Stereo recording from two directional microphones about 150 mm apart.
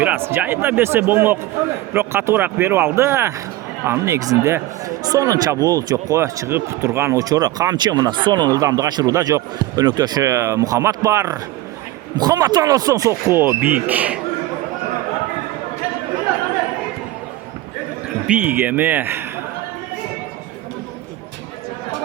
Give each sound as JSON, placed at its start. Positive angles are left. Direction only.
{"t": 0.0, "sound": "speech", "side_deg": -15}
{"t": 18.3, "sound": "speech", "side_deg": -10}